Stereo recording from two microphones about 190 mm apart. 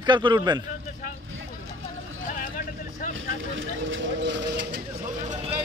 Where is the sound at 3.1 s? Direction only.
90° right; by 4.8 s 65° right (ahead or behind).